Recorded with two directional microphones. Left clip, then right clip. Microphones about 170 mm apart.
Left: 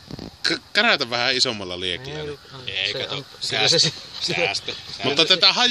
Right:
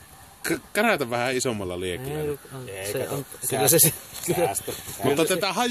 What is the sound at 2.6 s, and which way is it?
Speech, 30° right (ahead or behind).